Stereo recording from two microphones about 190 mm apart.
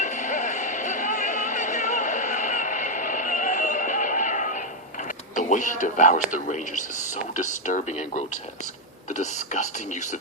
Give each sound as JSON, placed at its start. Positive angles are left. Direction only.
{"t": 0.0, "sound": "a sound", "side_deg": 40}
{"t": 5.4, "sound": "music", "side_deg": 40}
{"t": 6.3, "sound": "speech", "side_deg": 45}